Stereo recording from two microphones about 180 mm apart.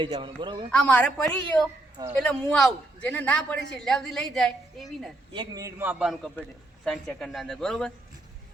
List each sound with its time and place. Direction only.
0.0 s a man's voice: 25° right (ahead or behind)
0.9 s a woman's voice: 5° left (ahead or behind)
5.3 s a man's voice: 25° right (ahead or behind); by 7.9 s 5° left (ahead or behind)